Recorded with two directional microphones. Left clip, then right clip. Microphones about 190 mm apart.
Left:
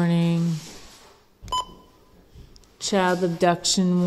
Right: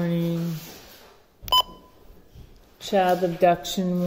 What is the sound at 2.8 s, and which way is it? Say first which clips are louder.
A woman's voice: right 1 dB; 65° left (ahead or behind).